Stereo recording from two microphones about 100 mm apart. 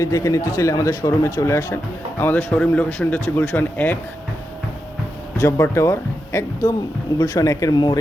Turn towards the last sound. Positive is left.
turn(degrees=35)  # may be behind; listen again after turning